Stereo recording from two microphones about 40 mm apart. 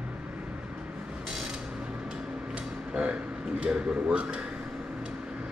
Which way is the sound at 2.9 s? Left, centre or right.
Right.